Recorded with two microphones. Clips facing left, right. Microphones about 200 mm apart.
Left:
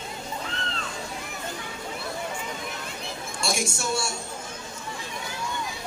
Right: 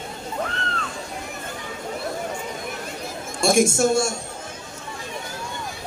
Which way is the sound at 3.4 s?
50° right (ahead or behind).